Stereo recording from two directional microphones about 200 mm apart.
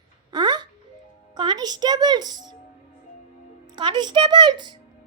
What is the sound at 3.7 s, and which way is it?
A woman's voice, 20° right (ahead or behind).